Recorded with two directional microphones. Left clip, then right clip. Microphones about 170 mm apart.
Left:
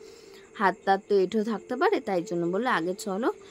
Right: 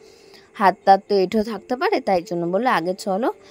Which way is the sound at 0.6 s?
30° right (ahead or behind).